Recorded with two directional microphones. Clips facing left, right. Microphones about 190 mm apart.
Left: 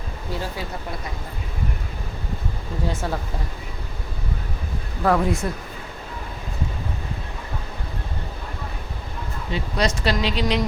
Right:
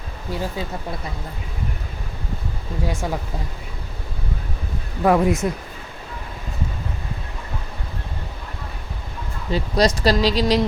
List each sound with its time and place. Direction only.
2.8 s speech: 10° right (ahead or behind)
5.0 s speech: 20° right (ahead or behind)
9.5 s speech: 35° right (ahead or behind)